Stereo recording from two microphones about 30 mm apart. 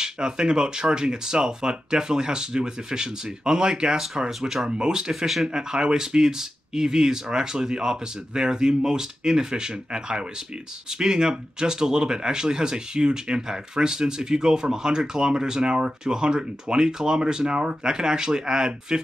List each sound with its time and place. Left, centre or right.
0.0 s speech: right
4.4 s speech: centre
4.7 s speech: right
5.1 s speech: centre
5.5 s speech: right